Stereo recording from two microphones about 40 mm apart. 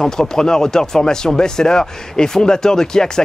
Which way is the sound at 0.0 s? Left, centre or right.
Centre.